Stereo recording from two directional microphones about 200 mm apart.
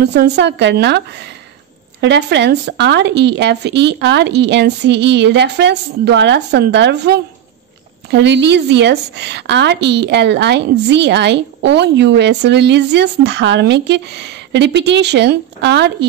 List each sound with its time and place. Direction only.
0.0 s a woman's voice: 55° right (ahead or behind)